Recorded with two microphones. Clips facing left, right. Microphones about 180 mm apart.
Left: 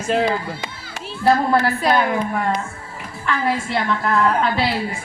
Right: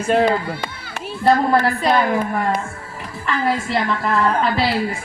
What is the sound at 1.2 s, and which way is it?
Speech, centre (ahead or behind).